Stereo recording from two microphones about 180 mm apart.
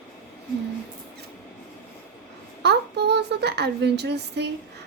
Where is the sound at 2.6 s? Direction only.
65° right (ahead or behind).